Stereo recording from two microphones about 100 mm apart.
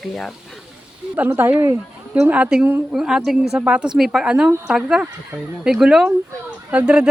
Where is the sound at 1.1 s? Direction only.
20° right (ahead or behind).